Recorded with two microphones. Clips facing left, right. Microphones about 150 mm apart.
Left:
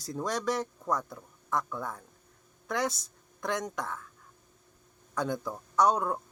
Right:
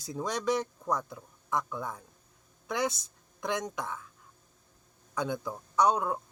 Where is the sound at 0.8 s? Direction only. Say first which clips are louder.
Even; 10° right (ahead or behind).